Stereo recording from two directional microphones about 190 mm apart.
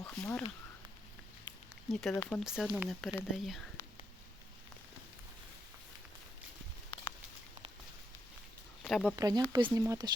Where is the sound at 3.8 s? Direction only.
10° left (ahead or behind).